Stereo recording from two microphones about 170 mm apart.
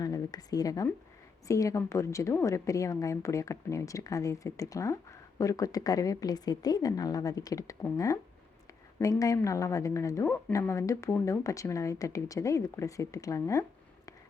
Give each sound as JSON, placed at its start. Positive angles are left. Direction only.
{"t": 0.0, "sound": "a woman's voice", "side_deg": 20}